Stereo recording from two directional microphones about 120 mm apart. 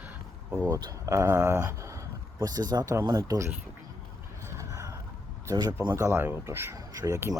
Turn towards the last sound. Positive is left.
turn(degrees=-25)  # may be behind; listen again after turning